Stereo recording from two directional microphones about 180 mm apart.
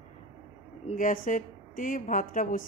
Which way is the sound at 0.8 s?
50° left (ahead or behind).